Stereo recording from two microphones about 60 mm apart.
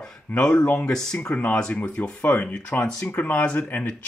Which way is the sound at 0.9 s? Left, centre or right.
Centre.